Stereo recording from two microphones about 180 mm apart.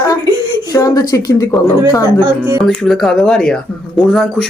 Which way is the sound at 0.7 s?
20° left (ahead or behind).